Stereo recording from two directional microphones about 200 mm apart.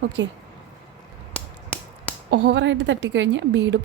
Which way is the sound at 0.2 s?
65° right (ahead or behind).